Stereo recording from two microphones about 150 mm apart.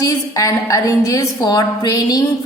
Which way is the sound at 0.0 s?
25° left (ahead or behind).